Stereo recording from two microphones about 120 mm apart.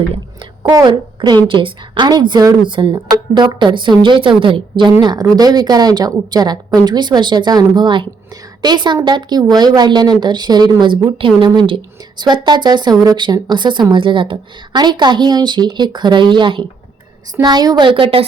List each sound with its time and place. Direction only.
0.7 s speech: 35° right (ahead or behind)
5.0 s a woman's voice: 35° right (ahead or behind); by 18.3 s 50° right (ahead or behind)